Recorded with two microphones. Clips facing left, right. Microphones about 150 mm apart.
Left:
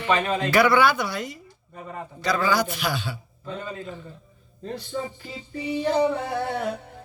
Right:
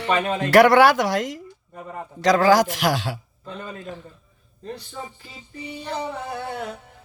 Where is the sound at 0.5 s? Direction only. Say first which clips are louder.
Right 6 dB; 90° right.